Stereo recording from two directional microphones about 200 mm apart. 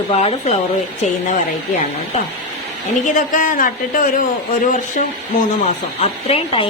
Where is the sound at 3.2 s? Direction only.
40° left (ahead or behind).